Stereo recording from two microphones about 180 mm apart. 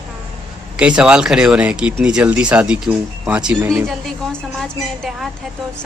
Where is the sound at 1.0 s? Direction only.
5° right (ahead or behind).